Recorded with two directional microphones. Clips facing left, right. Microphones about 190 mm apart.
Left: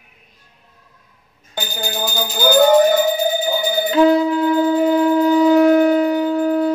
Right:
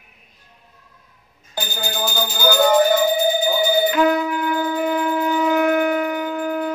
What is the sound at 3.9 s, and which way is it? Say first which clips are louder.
Wind instrument: left 5 dB; 30° left (ahead or behind).